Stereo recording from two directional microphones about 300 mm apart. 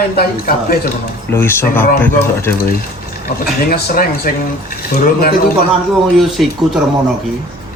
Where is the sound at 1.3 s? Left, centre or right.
Centre.